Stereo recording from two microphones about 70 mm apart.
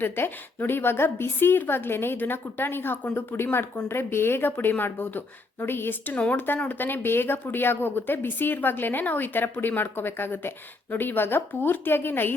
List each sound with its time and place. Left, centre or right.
0.0 s a woman's voice: left
6.1 s a woman's voice: centre